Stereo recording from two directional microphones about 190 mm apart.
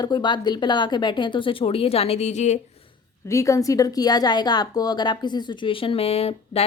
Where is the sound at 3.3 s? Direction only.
15° left (ahead or behind).